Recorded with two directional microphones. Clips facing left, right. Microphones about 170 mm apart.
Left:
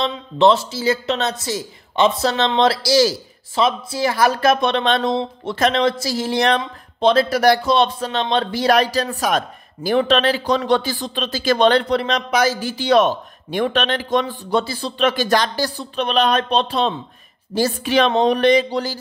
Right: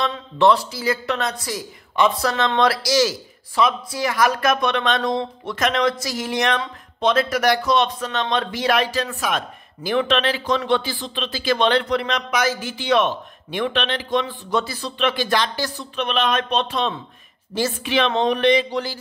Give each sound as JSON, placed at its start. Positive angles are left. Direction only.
{"t": 0.0, "sound": "speech", "side_deg": 25}
{"t": 14.5, "sound": "speech", "side_deg": 30}